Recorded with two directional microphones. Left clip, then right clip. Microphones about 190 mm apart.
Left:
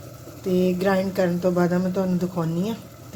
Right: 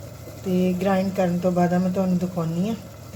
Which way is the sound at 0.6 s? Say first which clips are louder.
Left 1 dB; 30° left (ahead or behind).